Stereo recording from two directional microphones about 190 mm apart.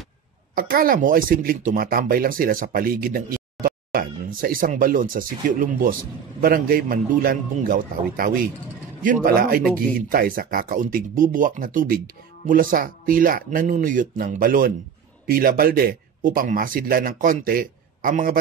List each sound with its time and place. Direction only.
0.6 s speech: 50° right (ahead or behind)